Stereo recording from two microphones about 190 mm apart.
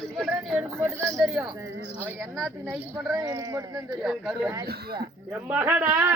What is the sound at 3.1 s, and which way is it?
Speech, 20° right (ahead or behind).